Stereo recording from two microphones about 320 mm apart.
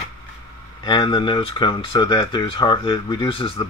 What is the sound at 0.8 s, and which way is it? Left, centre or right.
Speech, centre.